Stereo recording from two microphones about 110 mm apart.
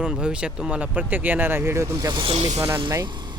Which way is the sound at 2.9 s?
40° right (ahead or behind).